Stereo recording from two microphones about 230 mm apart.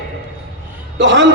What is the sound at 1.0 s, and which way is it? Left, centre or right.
Speech, right.